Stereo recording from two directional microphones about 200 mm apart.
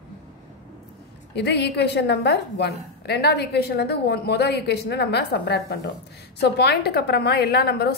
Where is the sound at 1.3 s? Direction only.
55° left (ahead or behind).